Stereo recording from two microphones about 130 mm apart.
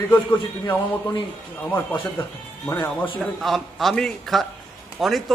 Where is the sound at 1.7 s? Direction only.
15° left (ahead or behind).